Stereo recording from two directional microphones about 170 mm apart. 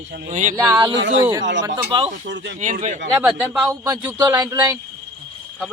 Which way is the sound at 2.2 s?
90° right.